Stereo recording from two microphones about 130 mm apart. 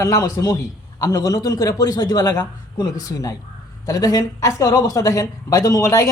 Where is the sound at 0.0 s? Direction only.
25° left (ahead or behind).